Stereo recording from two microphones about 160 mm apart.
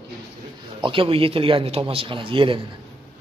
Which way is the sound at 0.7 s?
30° right (ahead or behind).